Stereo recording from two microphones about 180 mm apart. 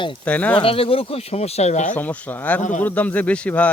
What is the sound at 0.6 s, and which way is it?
Speech, 30° left (ahead or behind).